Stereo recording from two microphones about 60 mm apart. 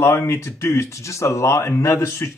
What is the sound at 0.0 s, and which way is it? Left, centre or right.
Speech, left.